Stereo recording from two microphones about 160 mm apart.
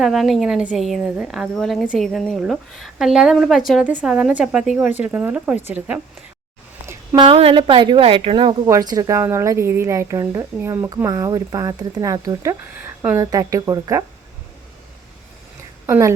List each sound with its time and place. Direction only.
0.0 s a woman's voice: centre (ahead or behind)
6.8 s a sound: 20° right (ahead or behind)
7.3 s speech: 35° right (ahead or behind)
15.9 s a woman's voice: 20° right (ahead or behind)